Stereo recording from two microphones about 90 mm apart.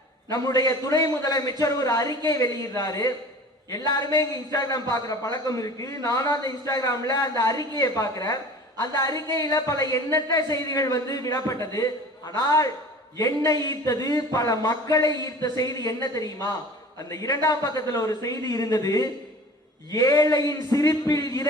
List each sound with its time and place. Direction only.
0.3 s a man's voice: 40° left (ahead or behind)